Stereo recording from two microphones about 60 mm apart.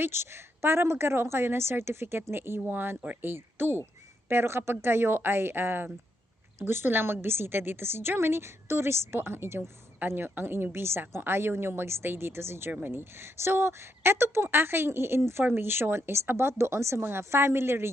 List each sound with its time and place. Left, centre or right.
0.0 s a woman's voice: right